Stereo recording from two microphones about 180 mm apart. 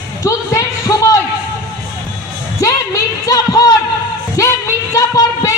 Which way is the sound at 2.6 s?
20° left (ahead or behind).